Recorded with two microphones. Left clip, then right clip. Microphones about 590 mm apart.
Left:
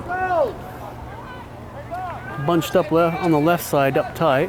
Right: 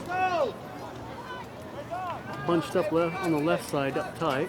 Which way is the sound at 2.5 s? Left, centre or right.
Left.